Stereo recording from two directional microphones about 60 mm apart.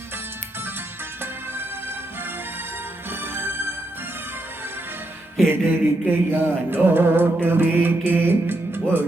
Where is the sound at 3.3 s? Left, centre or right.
Right.